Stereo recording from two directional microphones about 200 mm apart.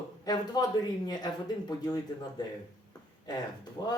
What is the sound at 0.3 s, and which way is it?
Speech, 20° left (ahead or behind).